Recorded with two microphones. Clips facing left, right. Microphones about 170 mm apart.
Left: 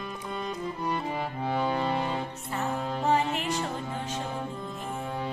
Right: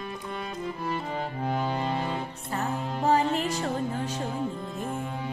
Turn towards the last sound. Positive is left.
turn(degrees=-40)  # may be behind; listen again after turning